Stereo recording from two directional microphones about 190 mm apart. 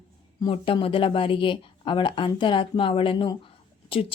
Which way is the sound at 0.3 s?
25° left (ahead or behind).